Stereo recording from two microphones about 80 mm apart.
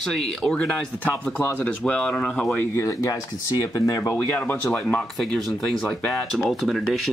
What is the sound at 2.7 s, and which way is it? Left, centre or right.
Speech, left.